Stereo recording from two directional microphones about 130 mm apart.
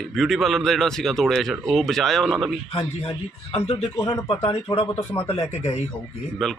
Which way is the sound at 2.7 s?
45° left (ahead or behind).